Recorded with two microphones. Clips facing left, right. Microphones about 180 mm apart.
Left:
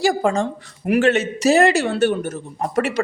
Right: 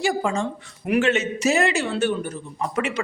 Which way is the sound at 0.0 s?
45° left (ahead or behind).